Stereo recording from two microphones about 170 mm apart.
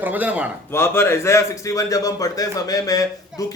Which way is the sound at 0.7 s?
15° left (ahead or behind).